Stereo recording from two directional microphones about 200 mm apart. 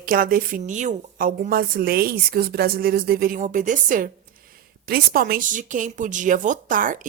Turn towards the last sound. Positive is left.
turn(degrees=-40)  # may be behind; listen again after turning